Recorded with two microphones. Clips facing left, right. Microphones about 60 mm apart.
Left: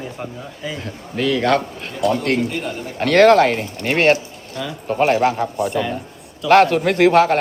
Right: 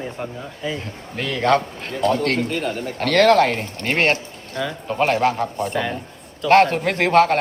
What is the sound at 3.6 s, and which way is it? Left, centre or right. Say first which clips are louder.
Speech: left 2 dB; right.